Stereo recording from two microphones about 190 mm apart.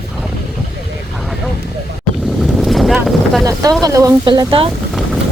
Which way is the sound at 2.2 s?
Centre (ahead or behind).